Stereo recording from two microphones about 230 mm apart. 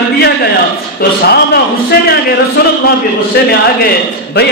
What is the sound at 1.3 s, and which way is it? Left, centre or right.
Speech, left.